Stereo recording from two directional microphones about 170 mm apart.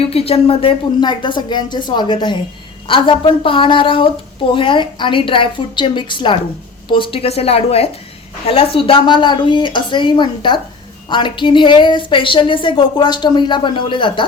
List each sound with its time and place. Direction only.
0.0 s a woman's voice: 35° left (ahead or behind)